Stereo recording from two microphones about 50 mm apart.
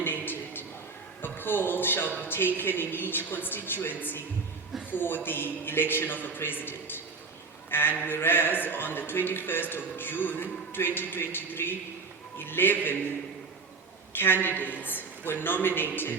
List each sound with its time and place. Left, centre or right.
0.0 s a sound: left
1.2 s music: left
2.2 s a man's voice: left
14.2 s a man's voice: left